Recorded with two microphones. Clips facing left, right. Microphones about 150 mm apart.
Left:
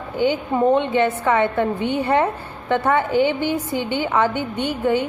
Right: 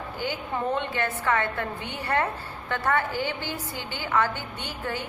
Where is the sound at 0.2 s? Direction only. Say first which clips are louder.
Left 12 dB; 20° left (ahead or behind).